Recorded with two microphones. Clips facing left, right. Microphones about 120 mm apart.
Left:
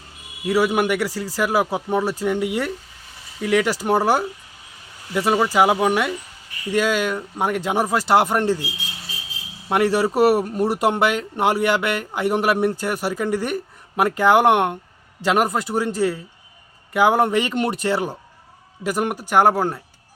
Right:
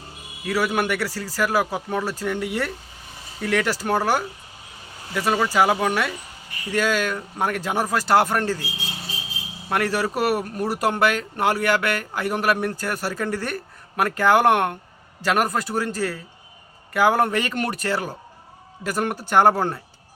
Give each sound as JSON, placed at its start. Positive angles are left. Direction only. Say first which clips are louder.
{"t": 0.4, "sound": "speech", "louder": "left 4 dB", "side_deg": 20}
{"t": 8.8, "sound": "a sound", "louder": "right 2 dB", "side_deg": -35}
{"t": 9.6, "sound": "speech", "louder": "left 5 dB", "side_deg": 20}